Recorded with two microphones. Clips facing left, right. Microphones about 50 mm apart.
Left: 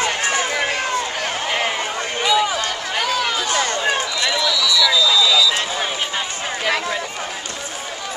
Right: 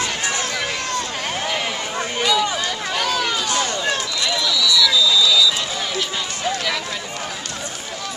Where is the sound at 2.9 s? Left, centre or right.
Centre.